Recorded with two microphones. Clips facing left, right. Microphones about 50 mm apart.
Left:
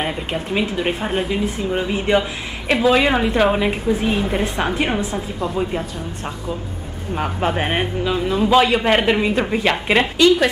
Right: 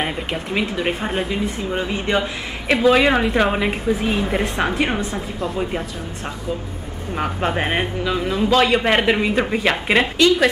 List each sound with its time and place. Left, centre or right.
0.0 s a woman's voice: centre
7.2 s a woman's voice: centre